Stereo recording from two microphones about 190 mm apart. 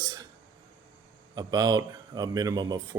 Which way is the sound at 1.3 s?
20° right (ahead or behind).